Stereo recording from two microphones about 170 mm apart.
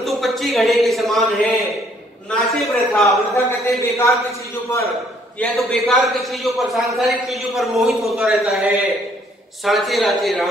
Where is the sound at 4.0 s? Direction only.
15° left (ahead or behind).